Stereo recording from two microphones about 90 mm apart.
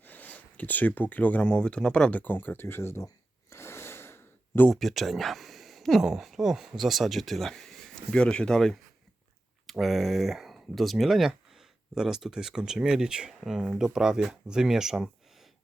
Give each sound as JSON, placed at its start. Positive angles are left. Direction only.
{"t": 0.0, "sound": "speech", "side_deg": 20}
{"t": 3.5, "sound": "sigh", "side_deg": 30}
{"t": 4.7, "sound": "speech", "side_deg": 0}